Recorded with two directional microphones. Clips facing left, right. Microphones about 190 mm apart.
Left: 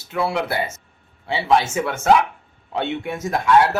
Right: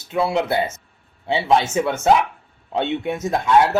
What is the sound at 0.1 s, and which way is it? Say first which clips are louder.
Speech: right 3 dB; 20° right (ahead or behind).